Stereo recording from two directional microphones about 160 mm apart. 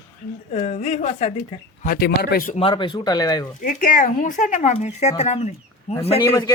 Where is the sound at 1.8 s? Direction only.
70° left (ahead or behind).